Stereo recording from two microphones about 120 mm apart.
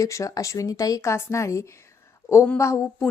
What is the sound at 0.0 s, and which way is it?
A woman's voice, 25° left (ahead or behind).